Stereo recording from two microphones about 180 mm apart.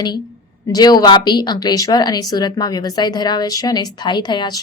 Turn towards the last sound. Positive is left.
turn(degrees=25)  # may be behind; listen again after turning